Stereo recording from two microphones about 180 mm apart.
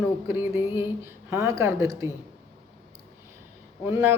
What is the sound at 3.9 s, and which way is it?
Speech, 15° right (ahead or behind).